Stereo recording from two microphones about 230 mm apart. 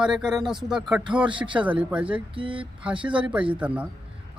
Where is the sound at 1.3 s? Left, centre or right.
Right.